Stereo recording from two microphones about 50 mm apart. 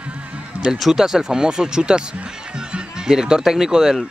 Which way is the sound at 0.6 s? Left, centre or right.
Centre.